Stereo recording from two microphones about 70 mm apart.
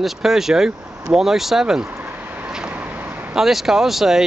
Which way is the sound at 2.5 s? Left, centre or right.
Centre.